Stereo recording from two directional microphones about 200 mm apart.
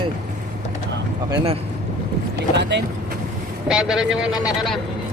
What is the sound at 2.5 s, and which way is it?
Speech, 60° right (ahead or behind).